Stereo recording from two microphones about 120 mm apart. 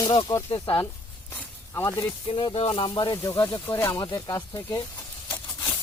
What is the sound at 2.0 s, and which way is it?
Speech, 45° left (ahead or behind).